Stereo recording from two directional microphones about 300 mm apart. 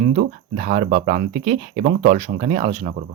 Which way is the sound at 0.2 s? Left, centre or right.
Right.